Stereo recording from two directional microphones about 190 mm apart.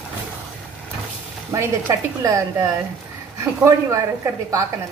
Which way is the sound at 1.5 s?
15° right (ahead or behind).